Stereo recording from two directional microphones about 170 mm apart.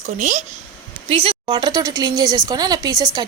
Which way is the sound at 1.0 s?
35° right (ahead or behind).